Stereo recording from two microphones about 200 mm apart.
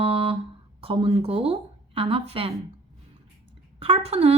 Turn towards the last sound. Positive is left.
turn(degrees=-30)  # may be behind; listen again after turning